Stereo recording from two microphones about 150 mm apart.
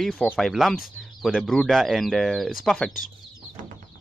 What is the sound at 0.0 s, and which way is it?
Speech, 5° left (ahead or behind).